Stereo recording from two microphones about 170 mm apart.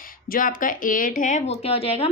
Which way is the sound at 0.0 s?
55° left (ahead or behind).